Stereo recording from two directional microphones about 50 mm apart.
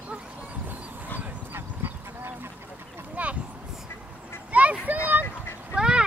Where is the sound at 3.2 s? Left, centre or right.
Right.